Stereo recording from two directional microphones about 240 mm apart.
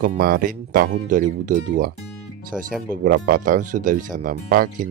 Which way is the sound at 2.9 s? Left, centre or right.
Right.